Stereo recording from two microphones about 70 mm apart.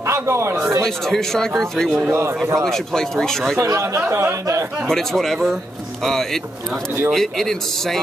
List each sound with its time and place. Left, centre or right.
0.0 s a sound: right
0.8 s speech: centre
2.0 s a man's voice: right
2.6 s speech: centre
3.6 s speech: right
4.8 s speech: centre